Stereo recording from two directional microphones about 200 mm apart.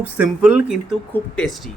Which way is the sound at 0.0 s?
5° right (ahead or behind).